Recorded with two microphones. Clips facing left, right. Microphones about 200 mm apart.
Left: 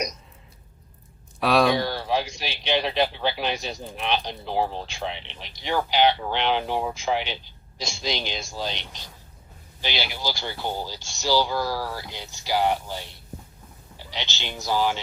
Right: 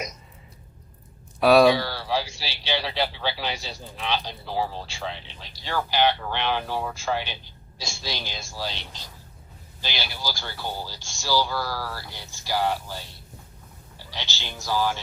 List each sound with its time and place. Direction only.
1.4 s speech: 5° right (ahead or behind)
1.7 s speech: 15° left (ahead or behind)
14.1 s speech: 20° left (ahead or behind)